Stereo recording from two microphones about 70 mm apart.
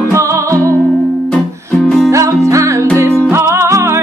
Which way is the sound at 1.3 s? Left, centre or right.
Centre.